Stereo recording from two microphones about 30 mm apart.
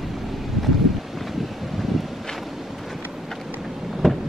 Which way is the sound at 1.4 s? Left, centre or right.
Centre.